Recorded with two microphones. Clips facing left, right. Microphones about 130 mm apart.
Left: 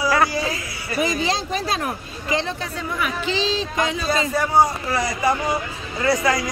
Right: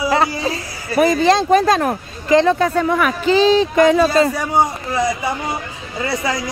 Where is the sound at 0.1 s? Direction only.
25° right (ahead or behind).